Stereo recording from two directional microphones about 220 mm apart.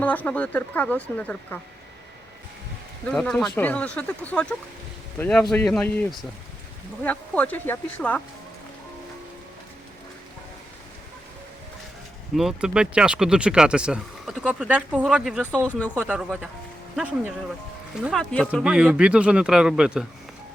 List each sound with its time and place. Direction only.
0.0 s speech: 5° left (ahead or behind)
3.1 s speech: centre (ahead or behind)
12.3 s speech: centre (ahead or behind)
18.0 s speech: centre (ahead or behind)